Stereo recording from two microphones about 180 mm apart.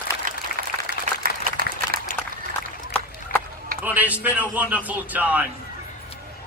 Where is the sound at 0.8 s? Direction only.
55° right (ahead or behind).